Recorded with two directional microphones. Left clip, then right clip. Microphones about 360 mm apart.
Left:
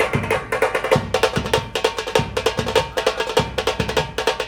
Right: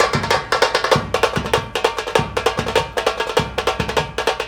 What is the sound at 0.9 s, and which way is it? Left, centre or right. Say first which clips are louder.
Music: right 1 dB; centre.